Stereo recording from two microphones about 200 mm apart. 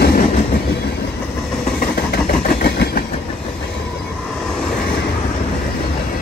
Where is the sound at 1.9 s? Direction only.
55° left (ahead or behind).